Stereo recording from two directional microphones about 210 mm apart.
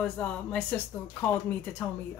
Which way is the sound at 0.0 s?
5° left (ahead or behind).